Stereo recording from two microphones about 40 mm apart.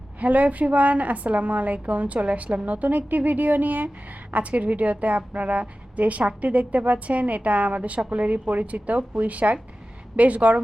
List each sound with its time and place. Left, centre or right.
0.2 s a woman's voice: right